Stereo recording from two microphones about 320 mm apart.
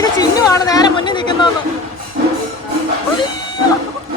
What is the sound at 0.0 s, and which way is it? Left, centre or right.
Chatter, centre.